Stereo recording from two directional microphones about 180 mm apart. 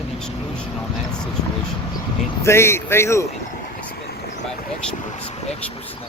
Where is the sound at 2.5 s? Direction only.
15° left (ahead or behind).